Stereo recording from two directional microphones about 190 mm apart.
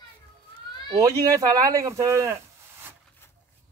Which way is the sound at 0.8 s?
20° right (ahead or behind).